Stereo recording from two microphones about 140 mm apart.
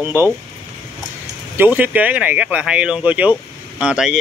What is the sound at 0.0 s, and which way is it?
Speech, 15° right (ahead or behind).